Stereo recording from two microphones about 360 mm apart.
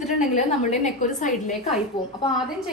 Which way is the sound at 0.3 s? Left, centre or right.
Centre.